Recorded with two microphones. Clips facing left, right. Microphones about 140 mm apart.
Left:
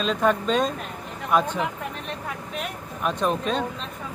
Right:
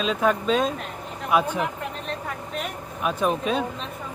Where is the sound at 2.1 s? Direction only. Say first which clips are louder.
Right 1 dB; centre (ahead or behind).